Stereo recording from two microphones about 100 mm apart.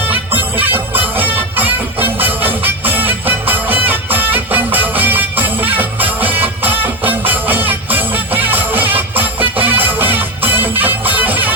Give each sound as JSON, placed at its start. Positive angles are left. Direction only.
{"t": 0.1, "sound": "music", "side_deg": -20}